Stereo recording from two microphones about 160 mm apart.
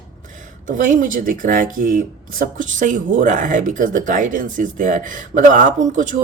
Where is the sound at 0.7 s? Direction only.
55° right (ahead or behind).